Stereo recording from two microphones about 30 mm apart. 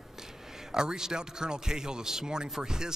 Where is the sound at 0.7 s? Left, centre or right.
Right.